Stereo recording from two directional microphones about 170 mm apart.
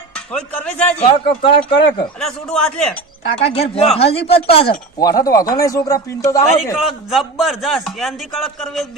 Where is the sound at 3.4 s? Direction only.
35° left (ahead or behind).